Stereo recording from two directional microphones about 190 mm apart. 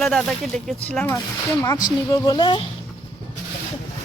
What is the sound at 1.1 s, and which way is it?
Speech, 15° left (ahead or behind).